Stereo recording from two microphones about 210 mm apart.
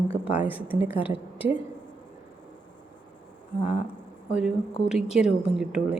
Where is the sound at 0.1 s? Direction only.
10° right (ahead or behind).